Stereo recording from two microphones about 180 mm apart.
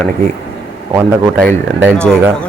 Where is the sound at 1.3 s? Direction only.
5° left (ahead or behind).